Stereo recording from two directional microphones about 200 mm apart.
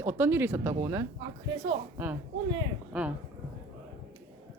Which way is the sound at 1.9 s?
10° right (ahead or behind).